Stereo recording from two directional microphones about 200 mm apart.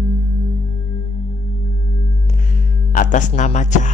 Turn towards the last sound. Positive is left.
turn(degrees=35)  # may be behind; listen again after turning